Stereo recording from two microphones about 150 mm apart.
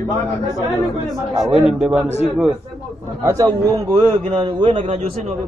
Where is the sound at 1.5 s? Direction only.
5° right (ahead or behind).